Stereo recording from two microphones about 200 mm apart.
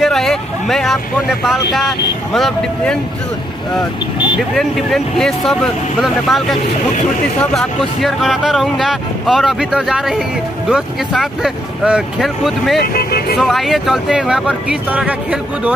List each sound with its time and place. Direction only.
0.0 s vehicle: centre (ahead or behind)
1.4 s speech: centre (ahead or behind)
4.6 s speech: centre (ahead or behind)
12.8 s speech: 50° left (ahead or behind)
13.4 s speech: centre (ahead or behind)